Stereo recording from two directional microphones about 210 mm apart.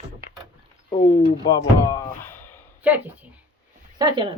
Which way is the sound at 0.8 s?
25° left (ahead or behind).